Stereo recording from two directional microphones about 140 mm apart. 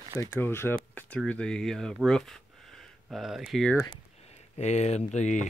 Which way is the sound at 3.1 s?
Centre (ahead or behind).